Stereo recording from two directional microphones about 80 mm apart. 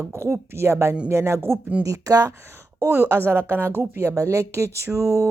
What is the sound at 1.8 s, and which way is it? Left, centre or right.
Speech, right.